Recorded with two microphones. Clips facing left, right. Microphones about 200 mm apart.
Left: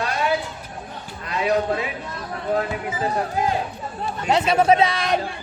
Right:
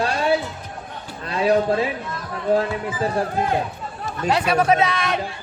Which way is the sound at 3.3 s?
55° right (ahead or behind).